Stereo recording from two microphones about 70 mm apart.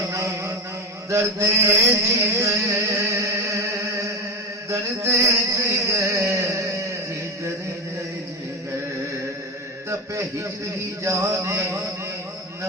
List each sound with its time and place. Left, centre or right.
0.1 s a sound: right
1.1 s music: right
11.0 s music: right